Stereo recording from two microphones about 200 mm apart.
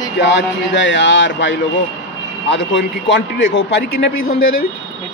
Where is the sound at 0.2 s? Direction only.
65° left (ahead or behind).